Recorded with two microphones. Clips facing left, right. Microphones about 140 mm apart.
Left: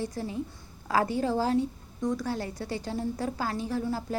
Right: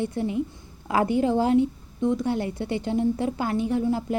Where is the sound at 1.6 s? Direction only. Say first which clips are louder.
Right 6 dB; 25° right (ahead or behind).